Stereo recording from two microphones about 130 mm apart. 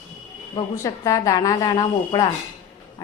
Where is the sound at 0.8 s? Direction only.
25° left (ahead or behind).